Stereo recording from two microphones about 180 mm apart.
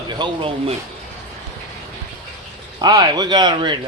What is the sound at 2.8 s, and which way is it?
A man's voice, 20° right (ahead or behind).